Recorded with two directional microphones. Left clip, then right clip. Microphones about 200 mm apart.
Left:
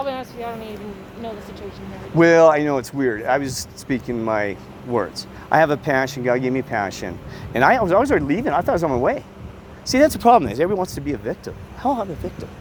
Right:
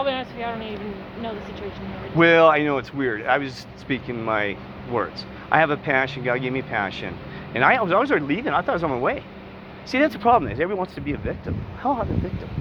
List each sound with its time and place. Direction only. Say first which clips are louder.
0.0 s speech: right 1 dB; 10° left (ahead or behind)
2.1 s speech: left 2 dB; 45° left (ahead or behind); by 10.8 s 60° left (ahead or behind)
11.0 s speech: left 3 dB; 45° left (ahead or behind)